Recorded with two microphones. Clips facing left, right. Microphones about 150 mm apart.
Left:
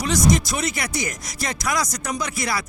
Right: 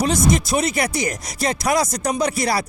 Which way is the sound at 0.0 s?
30° right (ahead or behind).